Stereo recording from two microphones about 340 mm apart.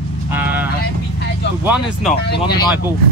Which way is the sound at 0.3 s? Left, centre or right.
Centre.